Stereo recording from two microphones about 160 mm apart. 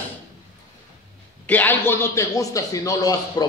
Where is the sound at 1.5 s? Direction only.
10° left (ahead or behind).